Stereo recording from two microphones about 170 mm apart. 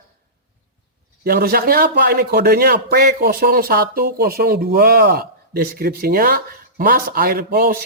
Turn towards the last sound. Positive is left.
turn(degrees=-60)  # may be behind; listen again after turning